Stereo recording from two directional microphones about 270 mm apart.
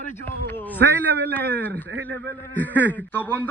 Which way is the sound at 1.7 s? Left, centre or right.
Right.